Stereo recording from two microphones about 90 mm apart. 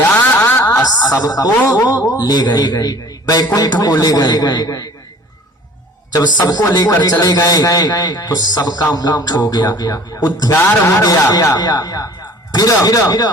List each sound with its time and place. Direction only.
0.4 s a sound: 30° left (ahead or behind)
0.8 s a man's voice: 45° left (ahead or behind)
6.1 s a man's voice: 45° left (ahead or behind)